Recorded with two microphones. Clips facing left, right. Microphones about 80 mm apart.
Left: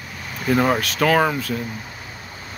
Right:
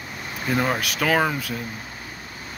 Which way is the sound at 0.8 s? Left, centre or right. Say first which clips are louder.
Left 4 dB; centre.